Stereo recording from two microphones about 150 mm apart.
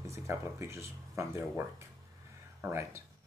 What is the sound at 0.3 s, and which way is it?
Speech, 20° right (ahead or behind).